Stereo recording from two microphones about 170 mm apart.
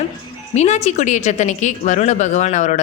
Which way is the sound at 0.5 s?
40° left (ahead or behind).